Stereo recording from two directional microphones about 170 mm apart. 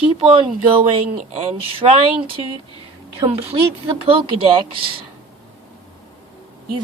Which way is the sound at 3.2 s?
35° right (ahead or behind).